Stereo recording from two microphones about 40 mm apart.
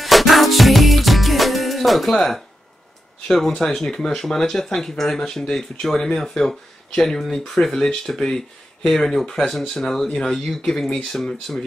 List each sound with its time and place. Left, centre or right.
0.0 s music: centre
2.1 s speech: centre
11.5 s speech: centre